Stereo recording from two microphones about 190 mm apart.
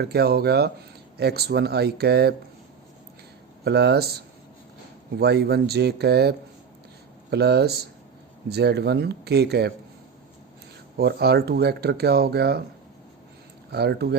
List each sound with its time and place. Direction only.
0.0 s speech: 55° right (ahead or behind)
3.6 s speech: 60° right (ahead or behind)
10.9 s speech: 55° right (ahead or behind)
13.7 s speech: 60° right (ahead or behind)